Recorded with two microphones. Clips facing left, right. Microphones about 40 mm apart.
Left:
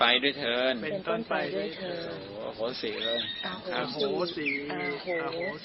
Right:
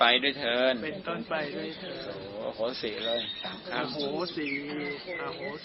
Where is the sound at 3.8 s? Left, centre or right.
Left.